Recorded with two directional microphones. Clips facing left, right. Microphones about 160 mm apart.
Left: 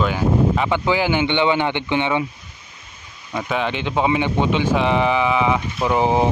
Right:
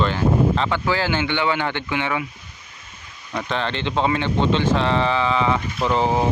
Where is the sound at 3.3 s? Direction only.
5° left (ahead or behind).